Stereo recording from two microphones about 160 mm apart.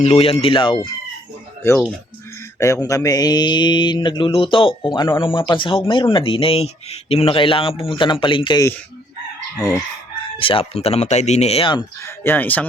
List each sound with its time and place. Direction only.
0.0 s speech: 40° left (ahead or behind)
2.6 s speech: 20° left (ahead or behind)
9.6 s speech: 20° left (ahead or behind)
12.0 s speech: 15° left (ahead or behind)